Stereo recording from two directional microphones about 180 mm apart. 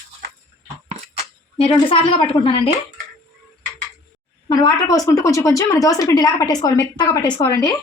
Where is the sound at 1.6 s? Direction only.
30° left (ahead or behind).